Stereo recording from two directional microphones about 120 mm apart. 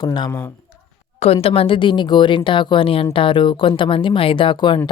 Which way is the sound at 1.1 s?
55° left (ahead or behind).